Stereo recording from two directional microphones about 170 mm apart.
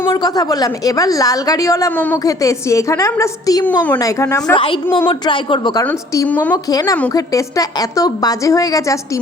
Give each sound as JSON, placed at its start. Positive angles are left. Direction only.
{"t": 0.0, "sound": "a woman's voice", "side_deg": 20}
{"t": 4.5, "sound": "a woman's voice", "side_deg": 30}
{"t": 5.8, "sound": "speech", "side_deg": 10}
{"t": 6.7, "sound": "a woman's voice", "side_deg": 20}